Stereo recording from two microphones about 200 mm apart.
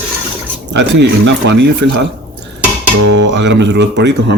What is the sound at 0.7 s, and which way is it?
Speech, 60° right (ahead or behind).